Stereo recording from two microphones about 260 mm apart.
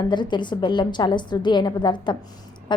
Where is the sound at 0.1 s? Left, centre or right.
Centre.